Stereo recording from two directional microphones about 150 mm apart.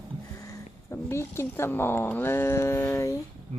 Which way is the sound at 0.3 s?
20° left (ahead or behind).